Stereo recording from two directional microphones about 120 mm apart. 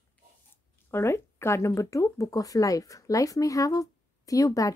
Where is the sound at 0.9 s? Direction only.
20° left (ahead or behind).